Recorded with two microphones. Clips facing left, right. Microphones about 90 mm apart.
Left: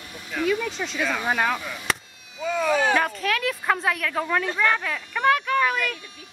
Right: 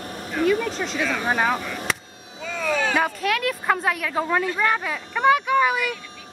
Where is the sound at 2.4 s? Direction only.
20° left (ahead or behind).